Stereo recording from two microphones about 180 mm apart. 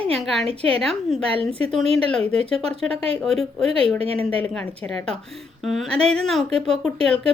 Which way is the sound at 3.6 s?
35° right (ahead or behind).